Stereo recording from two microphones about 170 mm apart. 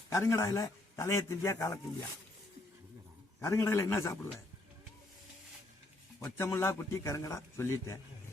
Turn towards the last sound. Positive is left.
turn(degrees=15)  # may be behind; listen again after turning